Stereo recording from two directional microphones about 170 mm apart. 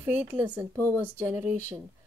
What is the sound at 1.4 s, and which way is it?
Speech, 45° left (ahead or behind).